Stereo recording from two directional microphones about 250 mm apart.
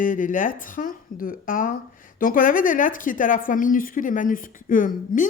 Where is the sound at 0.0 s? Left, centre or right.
Left.